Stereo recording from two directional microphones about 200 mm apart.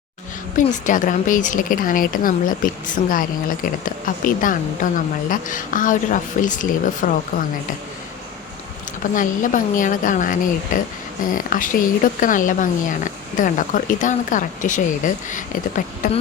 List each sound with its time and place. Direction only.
0.5 s a woman's voice: 40° left (ahead or behind)
9.1 s a woman's voice: 40° left (ahead or behind)